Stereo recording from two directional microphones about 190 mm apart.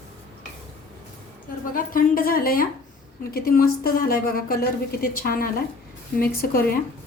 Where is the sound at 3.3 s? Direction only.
50° left (ahead or behind).